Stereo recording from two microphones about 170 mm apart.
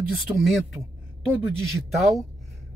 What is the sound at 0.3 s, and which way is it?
Speech, 15° right (ahead or behind).